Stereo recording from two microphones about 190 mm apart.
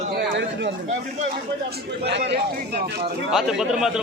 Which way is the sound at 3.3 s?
Centre (ahead or behind).